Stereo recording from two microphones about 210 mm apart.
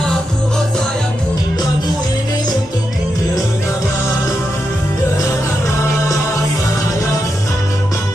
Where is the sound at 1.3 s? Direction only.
15° left (ahead or behind).